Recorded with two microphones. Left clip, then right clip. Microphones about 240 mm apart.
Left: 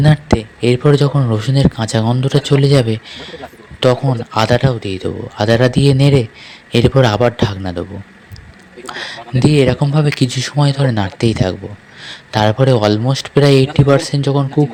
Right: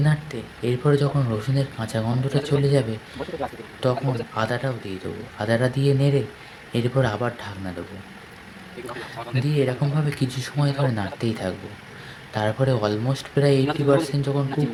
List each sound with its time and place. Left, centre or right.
0.0 s speech: left
3.8 s speech: left
8.9 s speech: left